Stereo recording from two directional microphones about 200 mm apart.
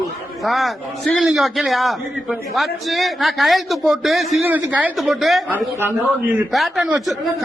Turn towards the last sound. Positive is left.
turn(degrees=0)  # may be behind; listen again after turning